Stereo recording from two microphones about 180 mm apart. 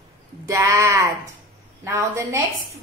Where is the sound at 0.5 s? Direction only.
15° right (ahead or behind).